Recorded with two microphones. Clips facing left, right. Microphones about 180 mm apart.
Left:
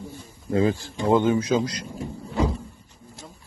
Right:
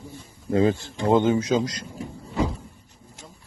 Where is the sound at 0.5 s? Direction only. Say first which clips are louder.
Right 1 dB; 30° right (ahead or behind).